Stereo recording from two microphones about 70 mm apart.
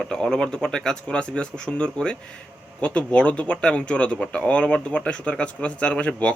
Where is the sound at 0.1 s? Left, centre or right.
Centre.